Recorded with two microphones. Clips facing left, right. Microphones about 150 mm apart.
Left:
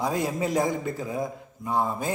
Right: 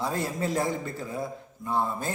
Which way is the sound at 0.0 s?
15° left (ahead or behind).